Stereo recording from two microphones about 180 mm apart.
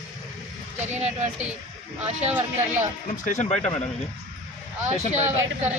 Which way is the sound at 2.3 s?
10° right (ahead or behind).